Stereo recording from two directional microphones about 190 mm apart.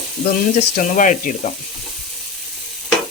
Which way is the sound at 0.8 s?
45° left (ahead or behind).